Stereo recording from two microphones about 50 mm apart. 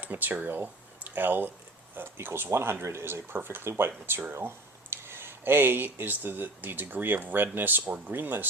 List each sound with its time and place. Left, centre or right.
0.0 s speech: right
3.3 s speech: right